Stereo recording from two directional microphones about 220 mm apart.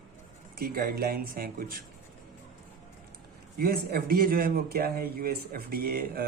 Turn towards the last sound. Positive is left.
turn(degrees=-45)  # may be behind; listen again after turning